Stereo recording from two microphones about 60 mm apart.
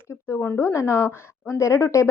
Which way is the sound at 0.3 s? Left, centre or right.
Left.